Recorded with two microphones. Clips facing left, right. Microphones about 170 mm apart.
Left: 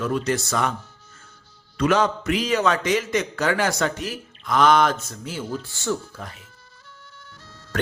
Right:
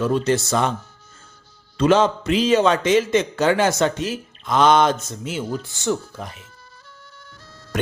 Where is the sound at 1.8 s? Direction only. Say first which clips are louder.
Right 4 dB; 25° right (ahead or behind).